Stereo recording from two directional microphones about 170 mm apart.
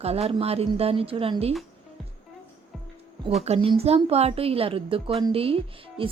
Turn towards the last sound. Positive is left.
turn(degrees=-35)  # may be behind; listen again after turning